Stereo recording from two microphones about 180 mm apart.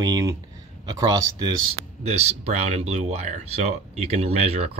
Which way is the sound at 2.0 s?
35° right (ahead or behind).